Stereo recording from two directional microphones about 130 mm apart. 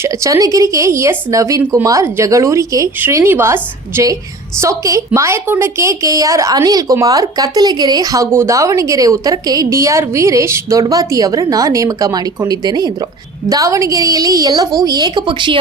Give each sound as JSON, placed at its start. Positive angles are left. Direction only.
{"t": 0.0, "sound": "a woman's voice", "side_deg": -25}